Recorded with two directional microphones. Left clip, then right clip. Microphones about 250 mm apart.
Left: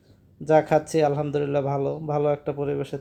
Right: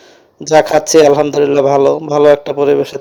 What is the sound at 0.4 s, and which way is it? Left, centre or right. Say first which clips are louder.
A man's voice: right 10 dB; right.